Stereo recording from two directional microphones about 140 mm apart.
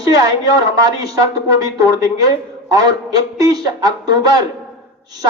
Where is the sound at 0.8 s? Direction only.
25° right (ahead or behind).